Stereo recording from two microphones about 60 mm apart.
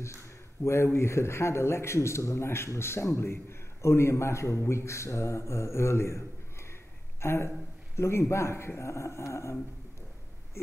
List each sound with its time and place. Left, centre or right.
0.7 s a man's voice: left